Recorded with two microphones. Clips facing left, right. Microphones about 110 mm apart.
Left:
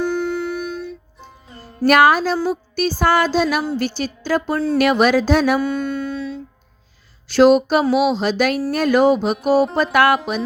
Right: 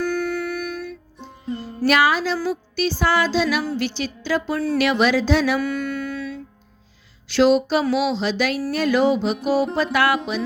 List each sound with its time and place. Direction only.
0.0 s music: 25° left (ahead or behind)
1.8 s music: 50° left (ahead or behind)
5.5 s music: 25° left (ahead or behind)
7.3 s music: 45° left (ahead or behind)